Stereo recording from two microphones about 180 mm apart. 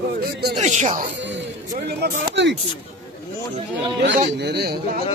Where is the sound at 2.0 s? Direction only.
75° right (ahead or behind).